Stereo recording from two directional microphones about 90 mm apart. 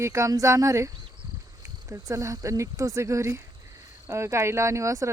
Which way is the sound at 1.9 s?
35° right (ahead or behind).